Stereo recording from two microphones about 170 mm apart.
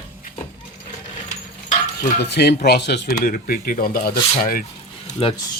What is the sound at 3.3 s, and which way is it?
Speech, 60° left (ahead or behind).